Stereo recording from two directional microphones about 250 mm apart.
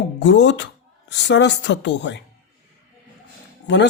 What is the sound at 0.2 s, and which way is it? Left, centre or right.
Speech, left.